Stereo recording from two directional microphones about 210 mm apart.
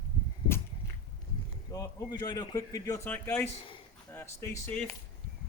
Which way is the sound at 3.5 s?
25° left (ahead or behind).